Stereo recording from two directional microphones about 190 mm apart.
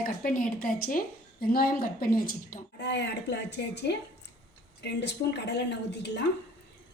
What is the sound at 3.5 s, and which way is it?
A woman's voice, 60° left (ahead or behind).